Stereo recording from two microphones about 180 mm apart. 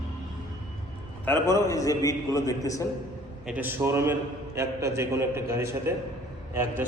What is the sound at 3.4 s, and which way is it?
A man's voice, 10° right (ahead or behind).